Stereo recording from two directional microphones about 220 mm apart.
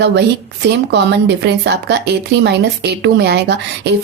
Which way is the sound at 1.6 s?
50° right (ahead or behind).